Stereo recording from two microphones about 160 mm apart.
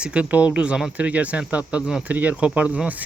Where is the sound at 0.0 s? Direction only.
5° right (ahead or behind).